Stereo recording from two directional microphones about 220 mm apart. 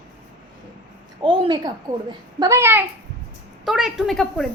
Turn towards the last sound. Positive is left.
turn(degrees=0)  # may be behind; listen again after turning